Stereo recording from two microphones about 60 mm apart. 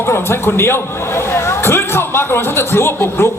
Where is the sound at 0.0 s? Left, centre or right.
Left.